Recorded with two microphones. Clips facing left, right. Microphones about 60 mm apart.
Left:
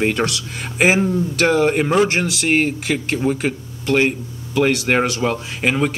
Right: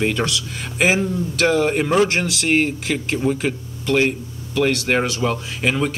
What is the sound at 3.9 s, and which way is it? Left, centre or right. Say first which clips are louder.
Speech: left 1 dB; left.